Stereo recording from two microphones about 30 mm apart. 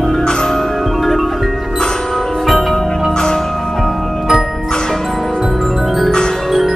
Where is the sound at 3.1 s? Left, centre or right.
Left.